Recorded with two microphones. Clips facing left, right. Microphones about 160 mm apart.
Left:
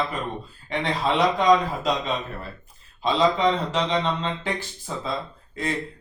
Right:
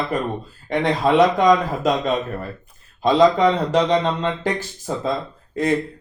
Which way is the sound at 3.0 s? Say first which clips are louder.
Right 6 dB; 45° right (ahead or behind).